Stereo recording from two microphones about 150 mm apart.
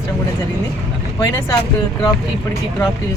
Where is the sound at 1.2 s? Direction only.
20° left (ahead or behind).